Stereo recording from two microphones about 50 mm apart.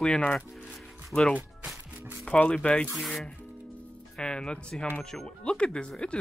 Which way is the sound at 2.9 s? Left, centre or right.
Centre.